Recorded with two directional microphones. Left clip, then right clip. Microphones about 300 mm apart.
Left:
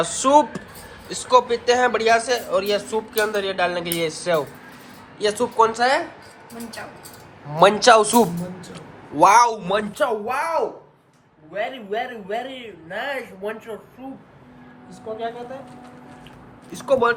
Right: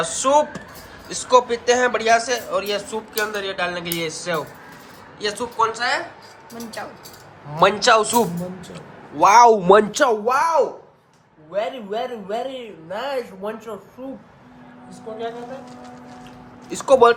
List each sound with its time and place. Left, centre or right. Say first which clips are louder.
0.0 s a man's voice: left 1 dB; centre
7.5 s a man's voice: left 2 dB; centre
9.4 s speech: right 7 dB; right
10.2 s a man's voice: right 5 dB; centre
16.8 s a man's voice: right 5 dB; centre